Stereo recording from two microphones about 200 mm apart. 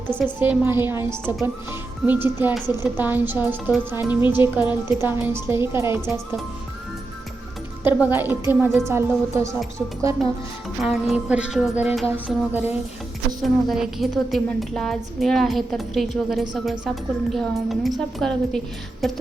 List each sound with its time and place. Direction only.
0.3 s speech: 10° right (ahead or behind)
2.0 s speech: 10° right (ahead or behind)
7.9 s speech: 5° right (ahead or behind)
10.8 s a woman's voice: 5° right (ahead or behind)